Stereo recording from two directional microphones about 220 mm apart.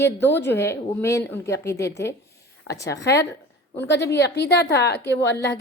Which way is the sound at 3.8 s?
50° left (ahead or behind).